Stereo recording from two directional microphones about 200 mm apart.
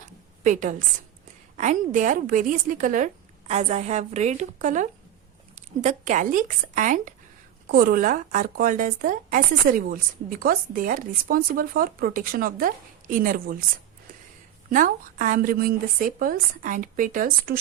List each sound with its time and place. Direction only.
0.4 s a woman's voice: 40° right (ahead or behind)
14.7 s speech: 40° right (ahead or behind)